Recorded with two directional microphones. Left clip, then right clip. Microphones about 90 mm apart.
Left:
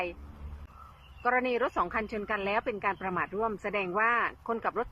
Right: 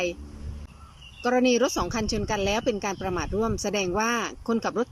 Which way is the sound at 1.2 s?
25° right (ahead or behind).